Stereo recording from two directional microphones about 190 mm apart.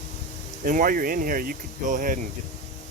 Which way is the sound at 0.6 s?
45° right (ahead or behind).